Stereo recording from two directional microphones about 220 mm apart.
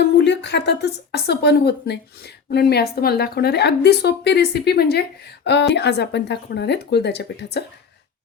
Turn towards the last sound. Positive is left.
turn(degrees=50)  # may be behind; listen again after turning